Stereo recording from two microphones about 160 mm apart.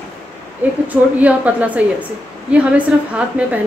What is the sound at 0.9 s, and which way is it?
A woman's voice, 10° right (ahead or behind).